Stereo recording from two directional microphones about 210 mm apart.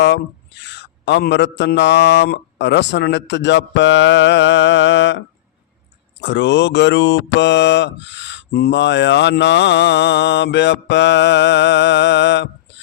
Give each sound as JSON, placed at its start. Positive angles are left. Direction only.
{"t": 0.0, "sound": "mantra", "side_deg": 55}